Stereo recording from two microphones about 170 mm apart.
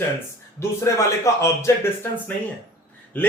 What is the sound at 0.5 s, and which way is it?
Speech, 15° left (ahead or behind).